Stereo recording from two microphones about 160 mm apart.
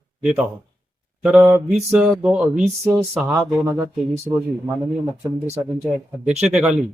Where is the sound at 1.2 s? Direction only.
5° right (ahead or behind).